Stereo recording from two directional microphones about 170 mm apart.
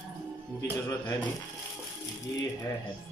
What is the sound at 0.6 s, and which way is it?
Speech, 20° left (ahead or behind).